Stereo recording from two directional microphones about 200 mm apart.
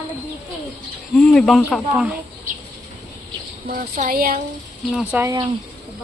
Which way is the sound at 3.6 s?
40° right (ahead or behind).